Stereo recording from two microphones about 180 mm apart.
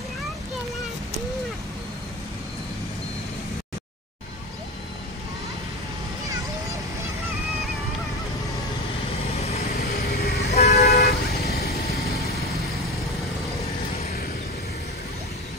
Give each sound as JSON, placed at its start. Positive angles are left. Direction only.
{"t": 9.8, "sound": "vehicle", "side_deg": 60}
{"t": 10.5, "sound": "vehicle", "side_deg": 40}
{"t": 10.9, "sound": "vehicle", "side_deg": 60}